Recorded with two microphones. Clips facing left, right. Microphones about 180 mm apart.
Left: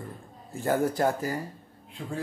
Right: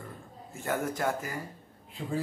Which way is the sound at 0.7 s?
35° left (ahead or behind).